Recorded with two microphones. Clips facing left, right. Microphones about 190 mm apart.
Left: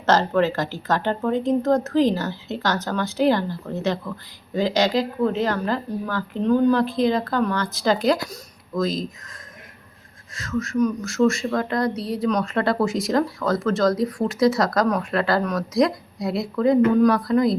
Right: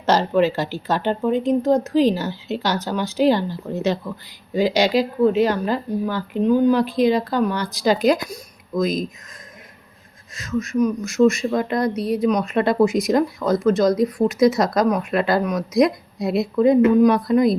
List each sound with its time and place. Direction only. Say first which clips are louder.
0.0 s speech: right 2 dB; 15° right (ahead or behind)
10.3 s speech: right 2 dB; 20° right (ahead or behind)